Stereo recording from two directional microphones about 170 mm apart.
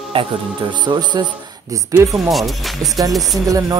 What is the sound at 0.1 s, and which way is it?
Speech, 30° right (ahead or behind).